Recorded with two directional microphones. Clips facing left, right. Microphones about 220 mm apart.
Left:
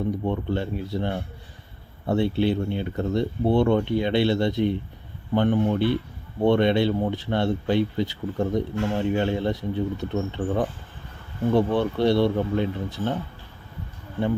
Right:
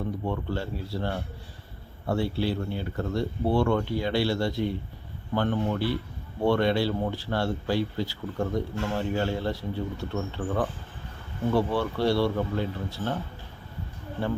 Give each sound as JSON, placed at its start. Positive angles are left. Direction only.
{"t": 0.3, "sound": "speech", "side_deg": 20}